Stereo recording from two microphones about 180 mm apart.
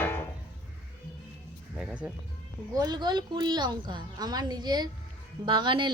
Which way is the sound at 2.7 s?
20° right (ahead or behind).